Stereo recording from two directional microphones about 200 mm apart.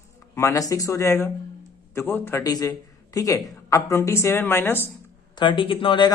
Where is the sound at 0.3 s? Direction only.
15° left (ahead or behind).